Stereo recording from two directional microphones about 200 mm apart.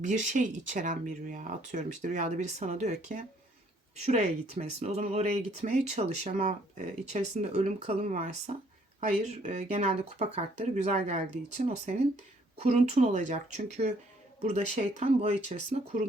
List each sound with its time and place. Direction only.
0.0 s speech: 40° right (ahead or behind)